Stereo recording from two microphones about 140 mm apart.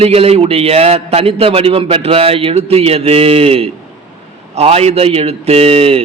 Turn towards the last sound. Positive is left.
turn(degrees=-45)  # may be behind; listen again after turning